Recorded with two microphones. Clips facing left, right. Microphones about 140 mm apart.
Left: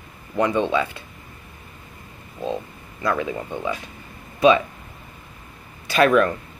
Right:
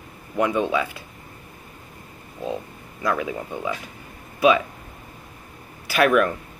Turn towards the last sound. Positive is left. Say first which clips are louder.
# left 2 dB
turn(degrees=-10)  # may be behind; listen again after turning